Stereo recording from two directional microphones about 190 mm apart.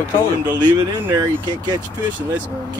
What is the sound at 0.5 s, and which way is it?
Speech, 20° right (ahead or behind).